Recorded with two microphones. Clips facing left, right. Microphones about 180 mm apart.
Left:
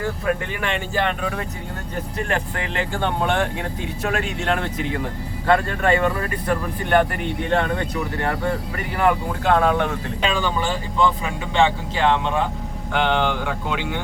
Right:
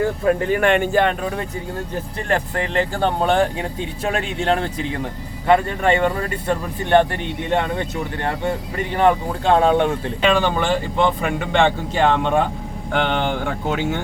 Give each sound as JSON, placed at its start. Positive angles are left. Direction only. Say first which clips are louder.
{"t": 0.3, "sound": "speech", "louder": "right 9 dB", "side_deg": -40}
{"t": 2.3, "sound": "speech", "louder": "right 7 dB", "side_deg": -35}
{"t": 10.2, "sound": "speech", "louder": "right 5 dB", "side_deg": -65}